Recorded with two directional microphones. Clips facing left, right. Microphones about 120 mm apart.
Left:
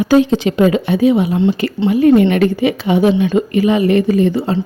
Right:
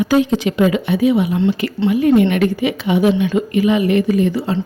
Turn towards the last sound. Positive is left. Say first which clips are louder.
# left 2 dB
turn(degrees=30)  # may be behind; listen again after turning